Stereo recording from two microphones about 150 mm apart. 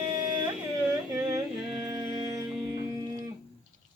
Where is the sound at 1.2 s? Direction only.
5° right (ahead or behind).